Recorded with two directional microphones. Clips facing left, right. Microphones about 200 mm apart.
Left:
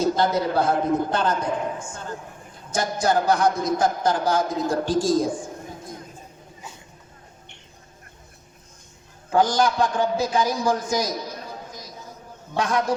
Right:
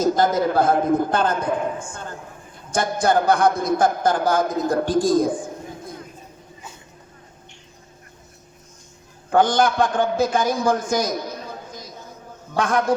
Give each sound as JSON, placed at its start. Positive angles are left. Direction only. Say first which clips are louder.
{"t": 0.0, "sound": "a man's voice", "louder": "right 3 dB", "side_deg": -50}
{"t": 9.3, "sound": "a man's voice", "louder": "right 2 dB", "side_deg": -55}
{"t": 12.5, "sound": "a man's voice", "louder": "right 2 dB", "side_deg": -50}